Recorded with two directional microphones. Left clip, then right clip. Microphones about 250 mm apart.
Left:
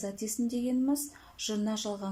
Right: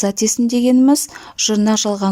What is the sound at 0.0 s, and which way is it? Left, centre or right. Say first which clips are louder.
Speech: right 18 dB; right.